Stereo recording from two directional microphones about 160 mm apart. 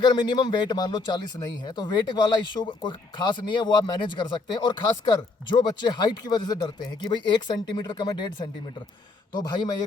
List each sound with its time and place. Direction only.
0.0 s speech: 30° left (ahead or behind)
9.3 s speech: 25° left (ahead or behind)